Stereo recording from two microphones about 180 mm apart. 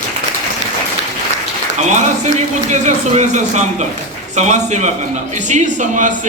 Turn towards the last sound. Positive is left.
turn(degrees=-45)  # may be behind; listen again after turning